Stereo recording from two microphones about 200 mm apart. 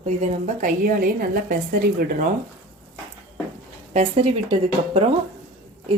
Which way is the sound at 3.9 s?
30° right (ahead or behind).